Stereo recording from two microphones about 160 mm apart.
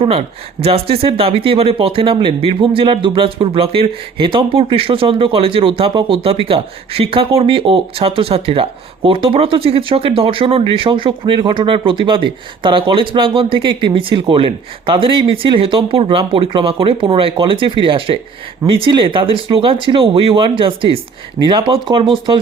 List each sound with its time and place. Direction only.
0.0 s speech: 40° right (ahead or behind)